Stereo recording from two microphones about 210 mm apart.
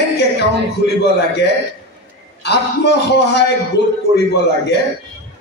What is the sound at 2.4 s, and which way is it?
A man's voice, 55° left (ahead or behind).